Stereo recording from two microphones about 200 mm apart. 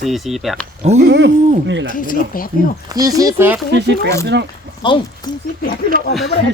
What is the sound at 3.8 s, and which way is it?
Speech, 60° right (ahead or behind).